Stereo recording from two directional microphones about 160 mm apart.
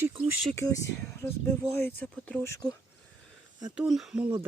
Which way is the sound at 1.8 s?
10° left (ahead or behind).